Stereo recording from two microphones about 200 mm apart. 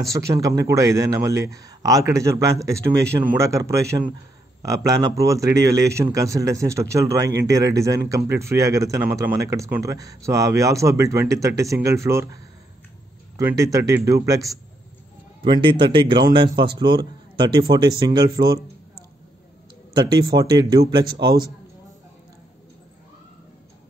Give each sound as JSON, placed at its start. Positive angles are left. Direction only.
{"t": 0.1, "sound": "speech", "side_deg": -15}
{"t": 13.4, "sound": "a man's voice", "side_deg": -15}
{"t": 19.9, "sound": "a man's voice", "side_deg": -20}